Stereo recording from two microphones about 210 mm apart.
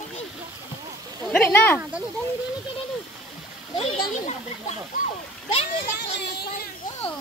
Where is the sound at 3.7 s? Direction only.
30° left (ahead or behind).